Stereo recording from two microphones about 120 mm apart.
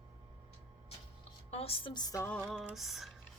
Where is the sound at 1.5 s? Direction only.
55° left (ahead or behind).